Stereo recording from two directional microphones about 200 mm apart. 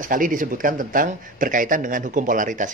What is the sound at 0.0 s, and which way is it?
Speech, 40° right (ahead or behind).